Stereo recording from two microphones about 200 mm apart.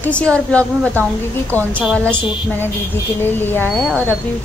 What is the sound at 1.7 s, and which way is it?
Speech, 5° right (ahead or behind).